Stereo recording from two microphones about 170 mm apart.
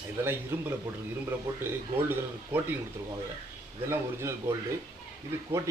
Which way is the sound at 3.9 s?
15° right (ahead or behind).